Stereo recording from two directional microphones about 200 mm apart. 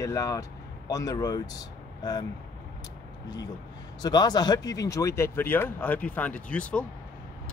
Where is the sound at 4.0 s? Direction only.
20° left (ahead or behind).